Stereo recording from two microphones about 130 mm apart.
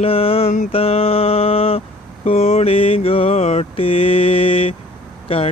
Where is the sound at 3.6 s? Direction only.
45° left (ahead or behind).